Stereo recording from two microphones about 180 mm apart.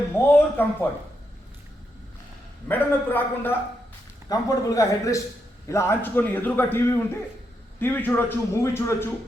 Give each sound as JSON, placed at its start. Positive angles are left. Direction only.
{"t": 0.3, "sound": "speech", "side_deg": 10}
{"t": 2.6, "sound": "a man's voice", "side_deg": 10}